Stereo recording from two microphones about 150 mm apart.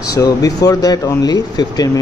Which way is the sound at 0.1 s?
25° left (ahead or behind).